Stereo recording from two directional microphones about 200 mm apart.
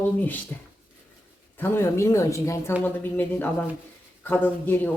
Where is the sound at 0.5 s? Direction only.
10° left (ahead or behind).